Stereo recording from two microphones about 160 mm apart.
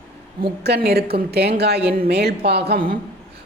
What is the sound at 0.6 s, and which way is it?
A woman's voice, 90° right.